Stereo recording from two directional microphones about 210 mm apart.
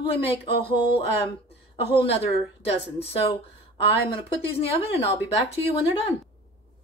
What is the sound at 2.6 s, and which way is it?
Speech, 30° left (ahead or behind).